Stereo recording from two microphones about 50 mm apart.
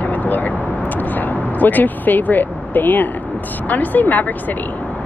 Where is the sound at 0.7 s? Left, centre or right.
Left.